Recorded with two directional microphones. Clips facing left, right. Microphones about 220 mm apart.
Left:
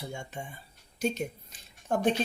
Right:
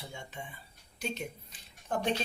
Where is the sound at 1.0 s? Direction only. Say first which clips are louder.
Left 7 dB; 40° left (ahead or behind).